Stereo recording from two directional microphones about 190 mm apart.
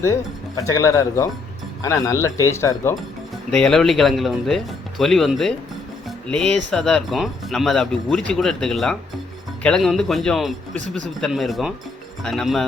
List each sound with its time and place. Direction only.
0.5 s speech: 15° left (ahead or behind)
3.5 s speech: 5° left (ahead or behind)